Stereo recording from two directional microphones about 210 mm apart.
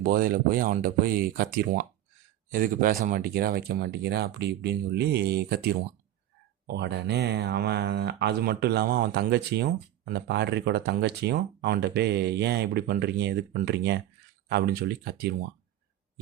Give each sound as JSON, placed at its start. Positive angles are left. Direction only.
{"t": 0.0, "sound": "speech", "side_deg": -40}